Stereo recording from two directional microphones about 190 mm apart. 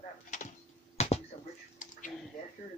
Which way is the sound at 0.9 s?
35° left (ahead or behind).